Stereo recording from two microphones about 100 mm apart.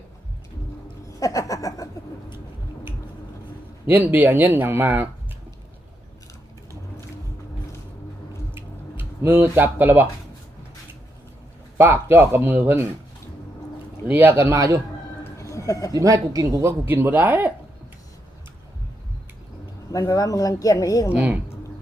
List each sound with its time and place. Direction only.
1.0 s a sound: 35° left (ahead or behind)
3.8 s speech: 20° right (ahead or behind)
8.5 s tick-tock: 25° right (ahead or behind)
11.8 s speech: 25° right (ahead or behind)
14.1 s speech: 20° right (ahead or behind)
15.2 s a sound: 30° left (ahead or behind)
15.9 s speech: 35° right (ahead or behind); by 17.5 s 15° right (ahead or behind)
19.9 s a woman's voice: 35° left (ahead or behind)
21.1 s a woman's voice: 15° right (ahead or behind)